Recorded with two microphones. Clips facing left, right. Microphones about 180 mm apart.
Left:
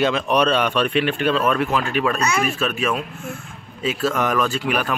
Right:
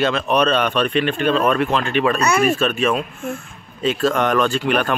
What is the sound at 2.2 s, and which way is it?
Speech, 55° right (ahead or behind).